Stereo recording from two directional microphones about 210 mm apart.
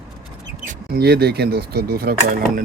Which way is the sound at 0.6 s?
50° right (ahead or behind).